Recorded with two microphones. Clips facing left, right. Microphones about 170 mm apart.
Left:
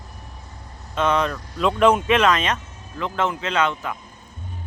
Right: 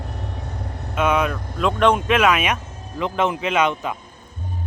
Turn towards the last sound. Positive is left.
turn(degrees=-20)  # may be behind; listen again after turning